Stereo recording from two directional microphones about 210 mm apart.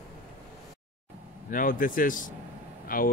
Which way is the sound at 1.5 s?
40° left (ahead or behind).